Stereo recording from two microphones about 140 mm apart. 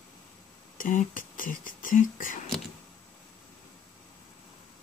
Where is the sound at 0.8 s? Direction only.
70° left (ahead or behind).